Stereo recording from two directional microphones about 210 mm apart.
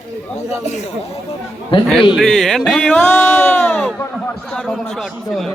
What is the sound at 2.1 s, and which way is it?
A man's voice, centre (ahead or behind).